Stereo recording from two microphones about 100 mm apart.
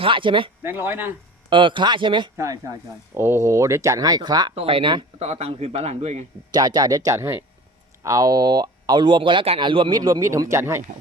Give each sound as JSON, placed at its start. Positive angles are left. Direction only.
{"t": 0.0, "sound": "speech", "side_deg": -55}
{"t": 0.6, "sound": "speech", "side_deg": -20}
{"t": 1.5, "sound": "speech", "side_deg": -55}
{"t": 2.4, "sound": "speech", "side_deg": -35}
{"t": 4.5, "sound": "speech", "side_deg": -65}
{"t": 5.2, "sound": "speech", "side_deg": -90}
{"t": 6.5, "sound": "speech", "side_deg": -45}